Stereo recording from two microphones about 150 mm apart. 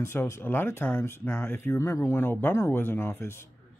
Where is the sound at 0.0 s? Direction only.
15° left (ahead or behind).